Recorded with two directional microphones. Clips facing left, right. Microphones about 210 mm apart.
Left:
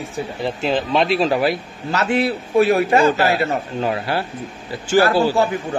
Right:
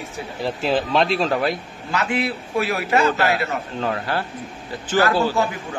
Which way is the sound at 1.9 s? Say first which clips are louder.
Left 4 dB; 40° left (ahead or behind).